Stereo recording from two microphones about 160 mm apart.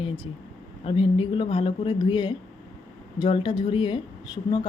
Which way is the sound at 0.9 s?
35° left (ahead or behind).